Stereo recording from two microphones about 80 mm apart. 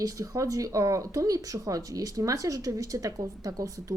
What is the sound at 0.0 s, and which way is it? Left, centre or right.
A woman's voice, right.